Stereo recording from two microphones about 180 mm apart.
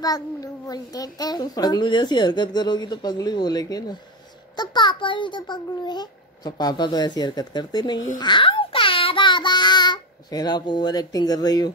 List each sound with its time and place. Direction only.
0.0 s a child's voice: 20° left (ahead or behind)
8.2 s child singing: 25° left (ahead or behind)